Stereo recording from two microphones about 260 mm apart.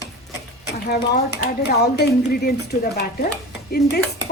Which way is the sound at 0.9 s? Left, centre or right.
Left.